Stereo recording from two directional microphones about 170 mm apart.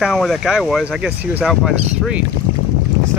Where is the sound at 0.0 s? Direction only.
Centre (ahead or behind).